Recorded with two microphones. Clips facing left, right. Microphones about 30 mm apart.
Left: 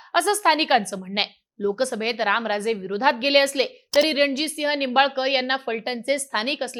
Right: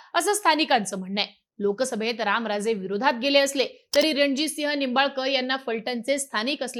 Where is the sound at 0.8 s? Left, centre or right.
Left.